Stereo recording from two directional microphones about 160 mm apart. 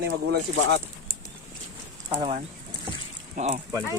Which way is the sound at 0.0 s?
90° right.